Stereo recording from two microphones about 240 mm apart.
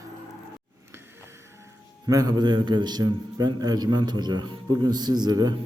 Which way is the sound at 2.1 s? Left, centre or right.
Centre.